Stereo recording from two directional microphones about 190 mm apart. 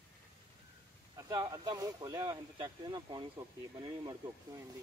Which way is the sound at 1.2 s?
20° right (ahead or behind).